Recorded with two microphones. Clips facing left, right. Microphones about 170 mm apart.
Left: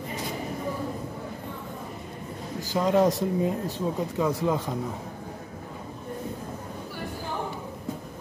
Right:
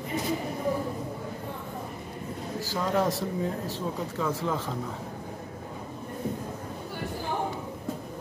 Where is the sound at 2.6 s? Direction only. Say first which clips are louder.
Left 5 dB; 20° left (ahead or behind).